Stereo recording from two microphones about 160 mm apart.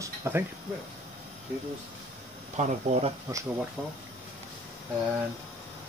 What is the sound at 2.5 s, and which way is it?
Speech, 45° right (ahead or behind).